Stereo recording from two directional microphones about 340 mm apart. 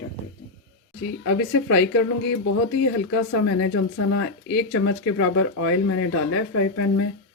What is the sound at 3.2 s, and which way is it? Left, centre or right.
Speech, left.